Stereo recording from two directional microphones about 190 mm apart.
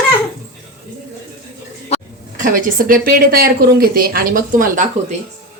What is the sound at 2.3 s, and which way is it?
Speech, 45° right (ahead or behind).